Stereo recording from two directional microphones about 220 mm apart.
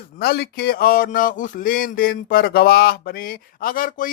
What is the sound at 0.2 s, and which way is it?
Speech, 45° left (ahead or behind).